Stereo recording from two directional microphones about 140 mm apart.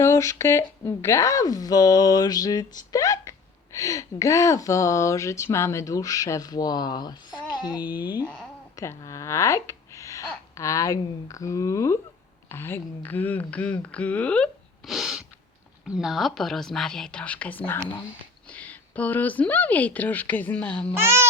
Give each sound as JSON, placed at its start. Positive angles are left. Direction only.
{"t": 0.0, "sound": "a woman's voice", "side_deg": 20}
{"t": 20.9, "sound": "speech", "side_deg": -15}